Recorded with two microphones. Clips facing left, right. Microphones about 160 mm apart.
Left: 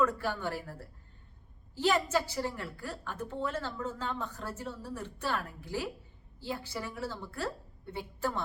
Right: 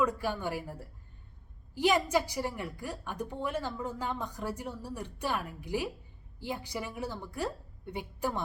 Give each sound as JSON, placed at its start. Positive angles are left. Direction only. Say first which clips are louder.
{"t": 0.0, "sound": "a woman's voice", "louder": "even", "side_deg": -15}